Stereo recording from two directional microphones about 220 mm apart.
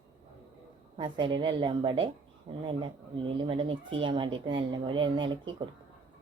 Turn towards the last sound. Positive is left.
turn(degrees=-20)  # may be behind; listen again after turning